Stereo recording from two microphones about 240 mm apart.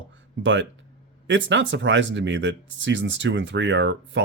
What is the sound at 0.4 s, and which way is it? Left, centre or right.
Speech, right.